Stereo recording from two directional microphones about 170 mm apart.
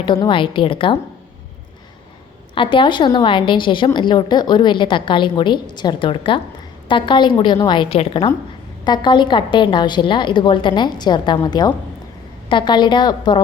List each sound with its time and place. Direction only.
0.0 s a woman's voice: 30° left (ahead or behind)
2.6 s a woman's voice: 30° left (ahead or behind)